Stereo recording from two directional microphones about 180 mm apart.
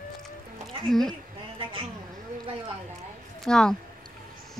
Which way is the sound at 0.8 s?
Centre (ahead or behind).